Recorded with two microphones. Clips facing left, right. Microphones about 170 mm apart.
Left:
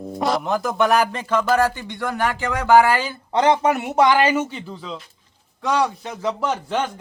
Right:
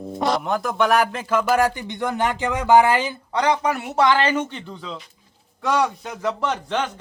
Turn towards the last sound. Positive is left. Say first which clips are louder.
# left 1 dB
turn(degrees=5)  # may be behind; listen again after turning